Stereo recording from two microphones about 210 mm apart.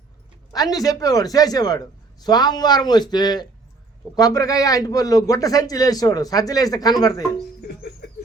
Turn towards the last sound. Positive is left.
turn(degrees=20)  # may be behind; listen again after turning